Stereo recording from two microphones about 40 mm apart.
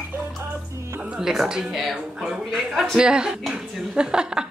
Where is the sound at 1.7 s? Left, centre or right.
Centre.